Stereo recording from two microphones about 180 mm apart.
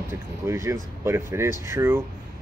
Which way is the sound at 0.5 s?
15° right (ahead or behind).